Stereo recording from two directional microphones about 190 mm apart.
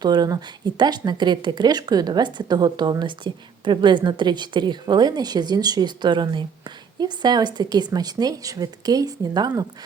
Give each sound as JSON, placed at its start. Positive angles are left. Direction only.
{"t": 0.0, "sound": "speech", "side_deg": -20}